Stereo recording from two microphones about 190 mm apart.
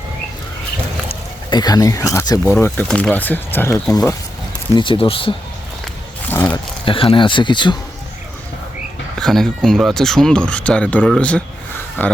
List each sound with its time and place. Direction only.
1.0 s speech: 25° left (ahead or behind)
4.7 s speech: 25° left (ahead or behind)
6.2 s a sound: 10° left (ahead or behind)
6.8 s speech: 25° left (ahead or behind)
9.1 s speech: centre (ahead or behind)